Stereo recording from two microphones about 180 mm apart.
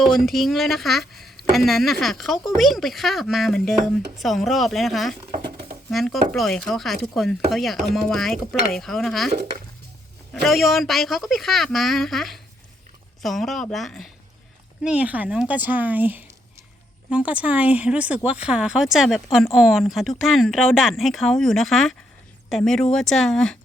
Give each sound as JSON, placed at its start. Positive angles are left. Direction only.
{"t": 0.0, "sound": "speech", "side_deg": 0}
{"t": 5.3, "sound": "dishes", "side_deg": -60}
{"t": 5.9, "sound": "speech", "side_deg": 0}
{"t": 10.4, "sound": "speech", "side_deg": 0}